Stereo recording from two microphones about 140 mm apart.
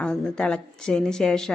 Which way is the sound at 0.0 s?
5° left (ahead or behind).